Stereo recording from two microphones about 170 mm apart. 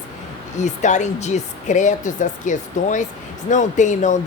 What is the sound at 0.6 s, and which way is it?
Speech, 45° left (ahead or behind).